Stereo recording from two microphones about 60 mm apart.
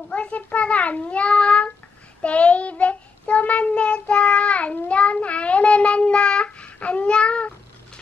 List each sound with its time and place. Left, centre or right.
0.1 s a child's voice: left
2.2 s child singing: left